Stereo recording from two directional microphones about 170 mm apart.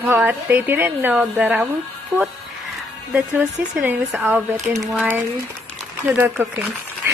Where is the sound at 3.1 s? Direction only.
10° right (ahead or behind).